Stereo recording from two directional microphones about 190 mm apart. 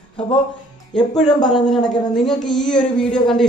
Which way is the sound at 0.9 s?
Centre (ahead or behind).